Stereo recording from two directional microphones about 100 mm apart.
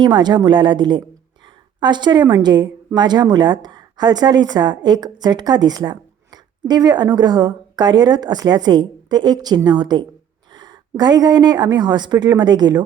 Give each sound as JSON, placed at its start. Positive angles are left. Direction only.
{"t": 0.0, "sound": "a woman's voice", "side_deg": -50}